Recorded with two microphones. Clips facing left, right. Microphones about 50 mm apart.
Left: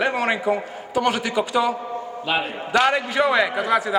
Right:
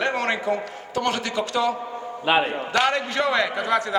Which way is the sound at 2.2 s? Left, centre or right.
Right.